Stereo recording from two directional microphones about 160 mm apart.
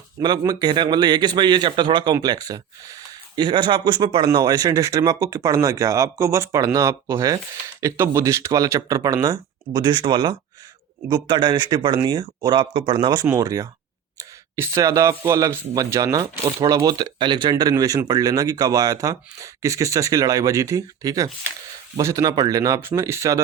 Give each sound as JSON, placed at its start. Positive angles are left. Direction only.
{"t": 0.2, "sound": "speech", "side_deg": -25}